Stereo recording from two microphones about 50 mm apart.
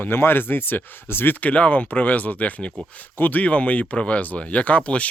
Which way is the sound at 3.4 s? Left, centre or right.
Left.